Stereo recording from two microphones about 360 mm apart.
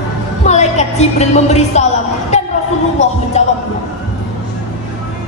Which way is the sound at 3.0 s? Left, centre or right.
Centre.